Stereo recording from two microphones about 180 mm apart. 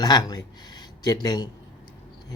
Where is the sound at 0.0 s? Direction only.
20° left (ahead or behind).